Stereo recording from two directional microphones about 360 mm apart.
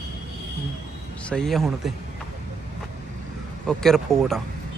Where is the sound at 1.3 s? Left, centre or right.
Centre.